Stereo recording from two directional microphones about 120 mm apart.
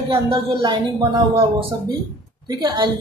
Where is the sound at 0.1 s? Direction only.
40° right (ahead or behind).